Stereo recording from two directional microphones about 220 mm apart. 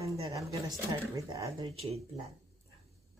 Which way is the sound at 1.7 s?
30° right (ahead or behind).